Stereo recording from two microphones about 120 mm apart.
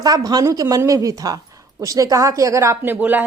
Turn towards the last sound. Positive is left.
turn(degrees=-15)  # may be behind; listen again after turning